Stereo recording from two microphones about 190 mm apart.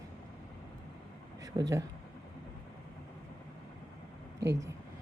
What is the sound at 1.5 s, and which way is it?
Speech, 20° right (ahead or behind).